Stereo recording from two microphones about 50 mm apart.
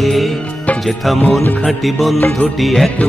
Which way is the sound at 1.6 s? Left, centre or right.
Centre.